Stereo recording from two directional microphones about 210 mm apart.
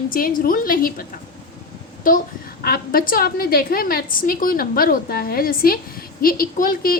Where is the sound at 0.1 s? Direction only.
45° left (ahead or behind).